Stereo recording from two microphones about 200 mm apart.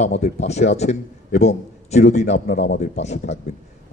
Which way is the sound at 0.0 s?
35° left (ahead or behind).